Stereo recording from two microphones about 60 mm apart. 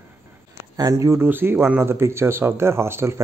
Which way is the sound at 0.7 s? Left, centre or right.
Right.